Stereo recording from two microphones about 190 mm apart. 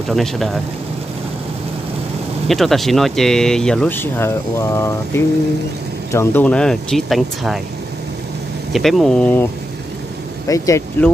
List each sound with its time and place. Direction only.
0.1 s speech: centre (ahead or behind)
2.4 s speech: centre (ahead or behind)
8.7 s speech: centre (ahead or behind); by 11.1 s 15° left (ahead or behind)